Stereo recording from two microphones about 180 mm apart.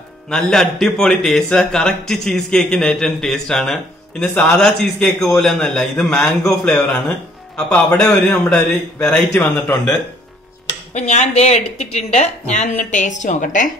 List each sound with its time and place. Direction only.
0.5 s speech: 5° left (ahead or behind)
10.9 s a woman's voice: 40° left (ahead or behind)